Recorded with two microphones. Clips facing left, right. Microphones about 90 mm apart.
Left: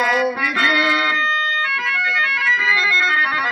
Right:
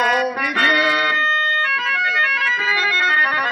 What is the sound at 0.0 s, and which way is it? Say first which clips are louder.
Music: even; 45° right (ahead or behind).